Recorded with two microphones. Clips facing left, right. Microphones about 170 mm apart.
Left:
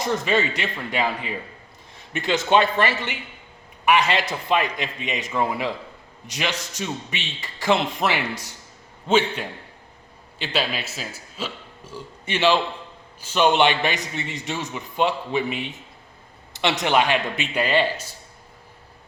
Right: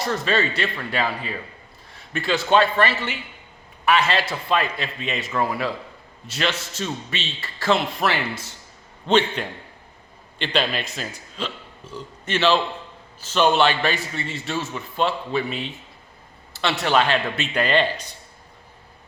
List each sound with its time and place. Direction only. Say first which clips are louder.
0.0 s a man's voice: left 1 dB; 15° left (ahead or behind)